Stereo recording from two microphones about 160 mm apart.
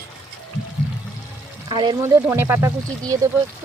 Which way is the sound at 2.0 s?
15° right (ahead or behind).